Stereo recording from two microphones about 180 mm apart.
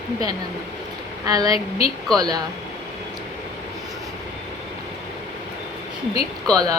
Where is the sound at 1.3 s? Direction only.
20° right (ahead or behind).